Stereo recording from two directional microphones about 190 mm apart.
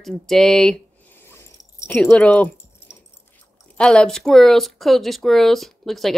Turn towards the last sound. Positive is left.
turn(degrees=0)  # may be behind; listen again after turning